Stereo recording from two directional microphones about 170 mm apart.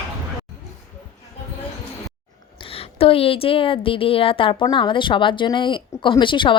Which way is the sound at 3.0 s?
35° left (ahead or behind).